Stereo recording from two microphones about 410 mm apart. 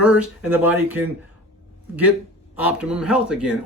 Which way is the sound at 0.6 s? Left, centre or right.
Centre.